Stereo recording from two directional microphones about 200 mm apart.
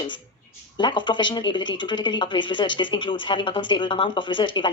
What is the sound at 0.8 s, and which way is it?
Speech, 25° left (ahead or behind).